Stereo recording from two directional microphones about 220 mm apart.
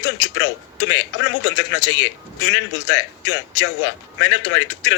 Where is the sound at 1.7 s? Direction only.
55° left (ahead or behind).